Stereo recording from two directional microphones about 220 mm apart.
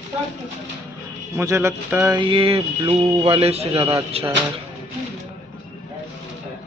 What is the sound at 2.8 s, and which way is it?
Speech, 15° right (ahead or behind).